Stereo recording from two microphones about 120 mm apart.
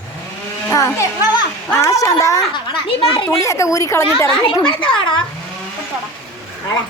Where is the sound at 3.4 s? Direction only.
25° left (ahead or behind).